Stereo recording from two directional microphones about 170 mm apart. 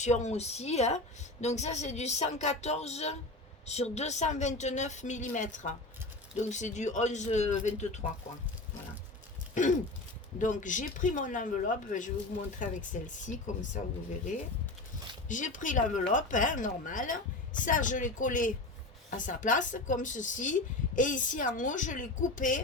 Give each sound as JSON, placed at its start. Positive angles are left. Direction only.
{"t": 0.0, "sound": "a woman's voice", "side_deg": 45}
{"t": 10.3, "sound": "speech", "side_deg": 50}